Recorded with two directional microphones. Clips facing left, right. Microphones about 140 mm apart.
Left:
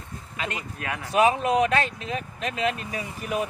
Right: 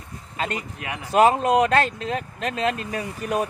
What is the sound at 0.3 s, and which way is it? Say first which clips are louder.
Speech: right 4 dB; 40° right (ahead or behind).